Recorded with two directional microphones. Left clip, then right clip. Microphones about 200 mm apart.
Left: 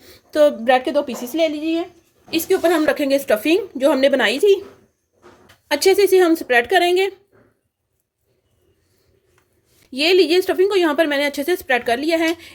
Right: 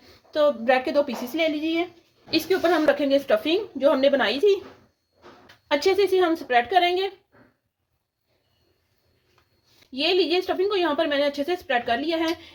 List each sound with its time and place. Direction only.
0.3 s a woman's voice: 45° left (ahead or behind)
0.7 s a woman's voice: 25° left (ahead or behind)
5.6 s a woman's voice: 30° left (ahead or behind); by 7.1 s 45° left (ahead or behind)
9.9 s a woman's voice: 45° left (ahead or behind)